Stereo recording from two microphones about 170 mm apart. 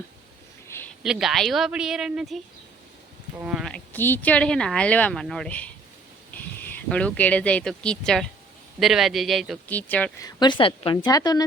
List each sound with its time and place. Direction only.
1.0 s speech: centre (ahead or behind)
3.9 s speech: 10° left (ahead or behind)
10.2 s a woman's voice: 25° left (ahead or behind)